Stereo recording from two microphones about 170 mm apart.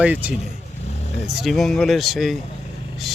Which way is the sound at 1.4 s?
Centre (ahead or behind).